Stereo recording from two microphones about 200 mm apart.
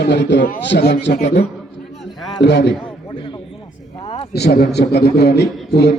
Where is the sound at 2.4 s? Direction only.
60° left (ahead or behind).